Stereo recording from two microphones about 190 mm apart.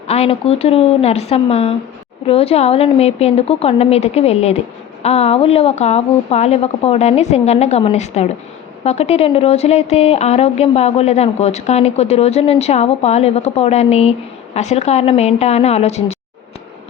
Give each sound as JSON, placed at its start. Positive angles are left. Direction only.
{"t": 0.1, "sound": "speech", "side_deg": 30}